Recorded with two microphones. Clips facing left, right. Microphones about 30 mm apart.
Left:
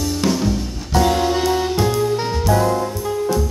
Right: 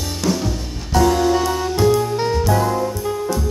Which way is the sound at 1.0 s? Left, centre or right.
Left.